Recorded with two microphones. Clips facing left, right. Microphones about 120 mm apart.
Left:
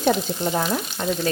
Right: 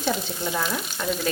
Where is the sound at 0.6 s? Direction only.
30° left (ahead or behind).